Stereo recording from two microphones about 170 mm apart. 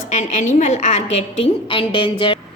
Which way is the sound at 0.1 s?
45° left (ahead or behind).